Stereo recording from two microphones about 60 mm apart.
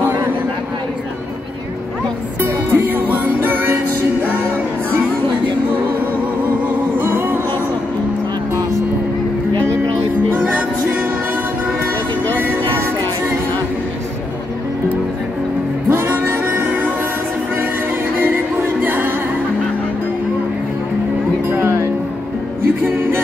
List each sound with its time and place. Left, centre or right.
2.4 s music: right
7.0 s music: right
10.3 s music: right
15.9 s music: right
18.2 s music: right
21.5 s music: right